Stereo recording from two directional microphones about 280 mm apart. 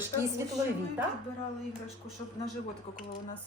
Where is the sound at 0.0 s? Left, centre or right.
Centre.